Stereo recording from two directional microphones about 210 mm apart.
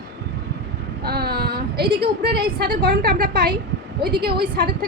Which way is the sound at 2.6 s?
45° right (ahead or behind).